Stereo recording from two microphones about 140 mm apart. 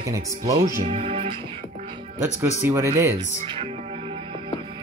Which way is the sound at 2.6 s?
20° right (ahead or behind).